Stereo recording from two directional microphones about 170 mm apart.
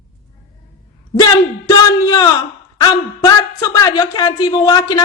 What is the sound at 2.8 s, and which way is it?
A man's voice, 20° left (ahead or behind).